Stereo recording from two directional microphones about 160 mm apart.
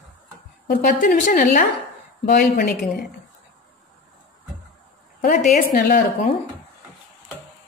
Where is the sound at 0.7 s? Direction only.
60° left (ahead or behind).